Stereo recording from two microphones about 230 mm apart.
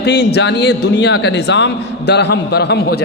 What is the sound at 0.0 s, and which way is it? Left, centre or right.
A man's voice, left.